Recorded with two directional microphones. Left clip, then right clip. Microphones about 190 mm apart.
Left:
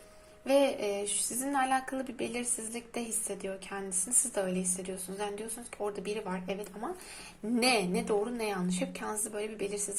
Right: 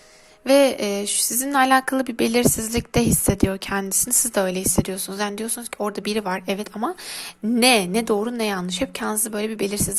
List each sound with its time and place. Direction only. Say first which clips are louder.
0.4 s speech: right 10 dB; 40° right (ahead or behind)